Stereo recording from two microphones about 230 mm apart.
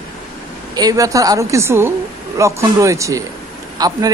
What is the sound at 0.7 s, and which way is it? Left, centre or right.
A man's voice, centre.